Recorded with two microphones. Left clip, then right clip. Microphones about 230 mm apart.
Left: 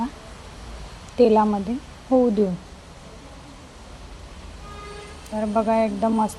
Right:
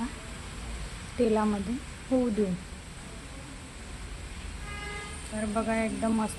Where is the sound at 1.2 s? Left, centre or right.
Left.